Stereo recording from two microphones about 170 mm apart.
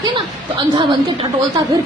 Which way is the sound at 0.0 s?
30° right (ahead or behind).